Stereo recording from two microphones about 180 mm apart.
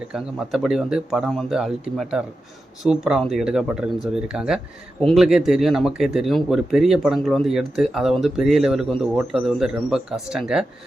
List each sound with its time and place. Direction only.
0.1 s speech: centre (ahead or behind)